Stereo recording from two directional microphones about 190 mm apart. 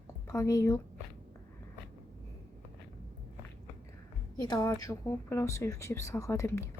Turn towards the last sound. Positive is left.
turn(degrees=15)  # may be behind; listen again after turning